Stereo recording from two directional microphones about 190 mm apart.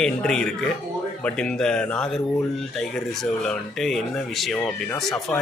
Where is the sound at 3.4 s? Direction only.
Centre (ahead or behind).